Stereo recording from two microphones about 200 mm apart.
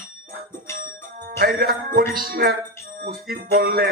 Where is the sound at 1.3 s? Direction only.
50° right (ahead or behind).